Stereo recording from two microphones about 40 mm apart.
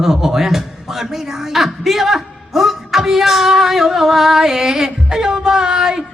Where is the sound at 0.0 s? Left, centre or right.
Centre.